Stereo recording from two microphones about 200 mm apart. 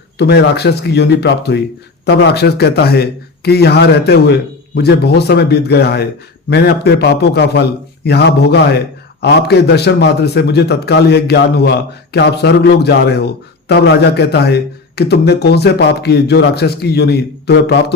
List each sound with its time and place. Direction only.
0.2 s a man's voice: 55° left (ahead or behind)